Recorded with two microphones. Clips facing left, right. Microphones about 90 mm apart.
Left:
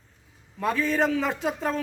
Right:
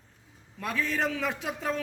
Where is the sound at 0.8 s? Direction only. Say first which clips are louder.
Left 5 dB; 20° left (ahead or behind).